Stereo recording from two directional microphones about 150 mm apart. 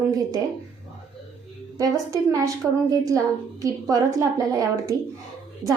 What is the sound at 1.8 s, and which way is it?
A woman's voice, 25° right (ahead or behind).